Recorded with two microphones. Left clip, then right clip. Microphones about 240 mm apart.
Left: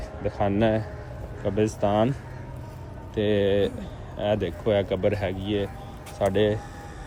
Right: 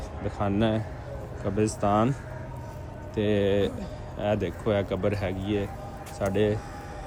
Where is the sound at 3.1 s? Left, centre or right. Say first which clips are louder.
Left 2 dB; centre.